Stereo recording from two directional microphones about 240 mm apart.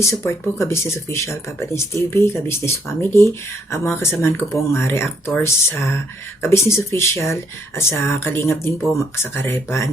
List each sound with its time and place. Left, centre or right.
0.0 s speech: centre